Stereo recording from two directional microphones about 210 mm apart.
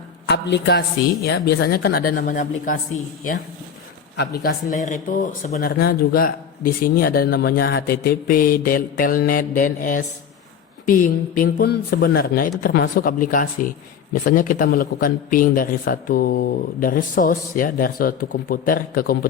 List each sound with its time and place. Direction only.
0.3 s speech: 55° left (ahead or behind); by 2.7 s 40° left (ahead or behind)
4.2 s speech: 45° left (ahead or behind)